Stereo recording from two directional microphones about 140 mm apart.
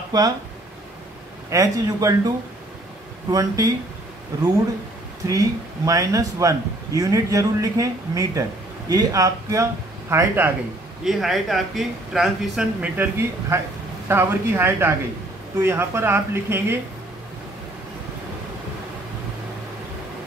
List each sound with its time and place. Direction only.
1.5 s speech: 25° right (ahead or behind)
5.2 s speech: 25° right (ahead or behind)
11.1 s speech: centre (ahead or behind)